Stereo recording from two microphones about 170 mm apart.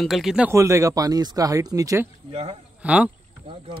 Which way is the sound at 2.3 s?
35° right (ahead or behind).